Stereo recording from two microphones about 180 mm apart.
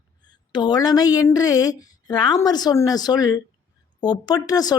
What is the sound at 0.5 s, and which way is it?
A woman's voice, 25° left (ahead or behind).